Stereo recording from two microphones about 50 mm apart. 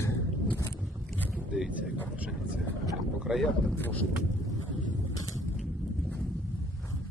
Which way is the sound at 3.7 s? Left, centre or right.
Left.